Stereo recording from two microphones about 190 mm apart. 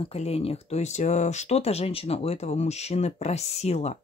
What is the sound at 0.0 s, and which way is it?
Speech, 35° left (ahead or behind).